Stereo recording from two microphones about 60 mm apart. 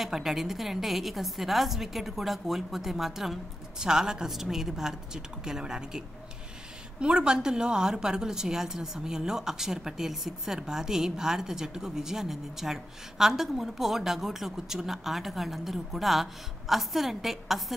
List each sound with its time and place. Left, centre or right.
0.0 s a woman's voice: centre